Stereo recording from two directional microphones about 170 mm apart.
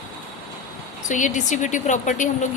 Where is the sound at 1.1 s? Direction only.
45° left (ahead or behind).